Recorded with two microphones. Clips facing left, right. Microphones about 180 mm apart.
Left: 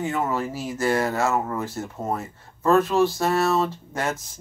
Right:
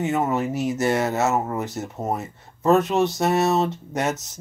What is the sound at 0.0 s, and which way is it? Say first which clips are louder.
Speech: right 3 dB; 20° right (ahead or behind).